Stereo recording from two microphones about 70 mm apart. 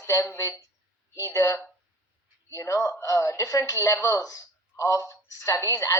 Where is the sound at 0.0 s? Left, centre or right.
Left.